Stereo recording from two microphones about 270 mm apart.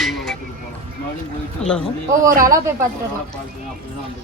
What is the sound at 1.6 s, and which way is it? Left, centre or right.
Speech, centre.